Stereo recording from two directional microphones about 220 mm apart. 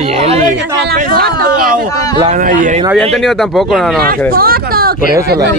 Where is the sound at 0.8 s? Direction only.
45° right (ahead or behind).